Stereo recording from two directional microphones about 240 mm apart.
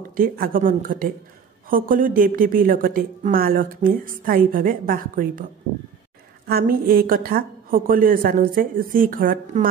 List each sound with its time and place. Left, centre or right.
0.1 s a woman's voice: right
6.4 s a woman's voice: right